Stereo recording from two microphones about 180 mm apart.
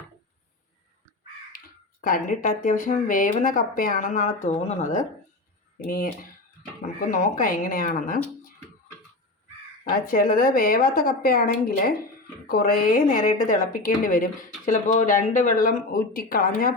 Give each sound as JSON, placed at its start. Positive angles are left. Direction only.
{"t": 1.5, "sound": "a woman's voice", "side_deg": 50}
{"t": 5.8, "sound": "a woman's voice", "side_deg": 55}
{"t": 7.1, "sound": "a woman's voice", "side_deg": 45}
{"t": 9.9, "sound": "a woman's voice", "side_deg": 50}